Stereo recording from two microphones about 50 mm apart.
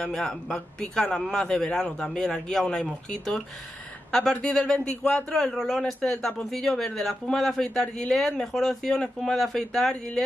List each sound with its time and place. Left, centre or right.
0.1 s speech: centre